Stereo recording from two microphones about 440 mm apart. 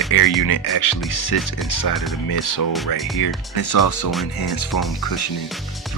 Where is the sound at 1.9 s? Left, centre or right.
Centre.